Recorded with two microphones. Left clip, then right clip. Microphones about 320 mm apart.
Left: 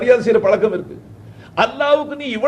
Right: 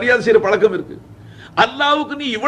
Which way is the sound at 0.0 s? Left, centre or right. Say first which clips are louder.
Even; centre.